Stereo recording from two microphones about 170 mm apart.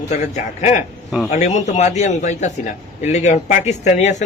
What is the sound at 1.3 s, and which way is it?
A man's voice, 40° left (ahead or behind).